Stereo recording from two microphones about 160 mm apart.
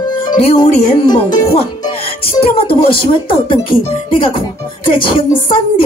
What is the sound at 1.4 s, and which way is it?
A woman's voice, 40° left (ahead or behind).